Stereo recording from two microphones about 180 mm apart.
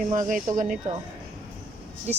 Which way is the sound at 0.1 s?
45° right (ahead or behind).